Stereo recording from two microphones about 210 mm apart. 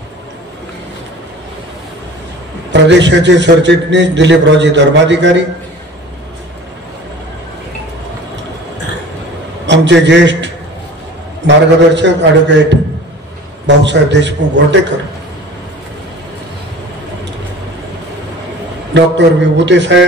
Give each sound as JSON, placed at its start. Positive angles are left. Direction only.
{"t": 2.7, "sound": "a man's voice", "side_deg": -55}
{"t": 9.7, "sound": "a man's voice", "side_deg": -55}
{"t": 18.9, "sound": "a man's voice", "side_deg": -55}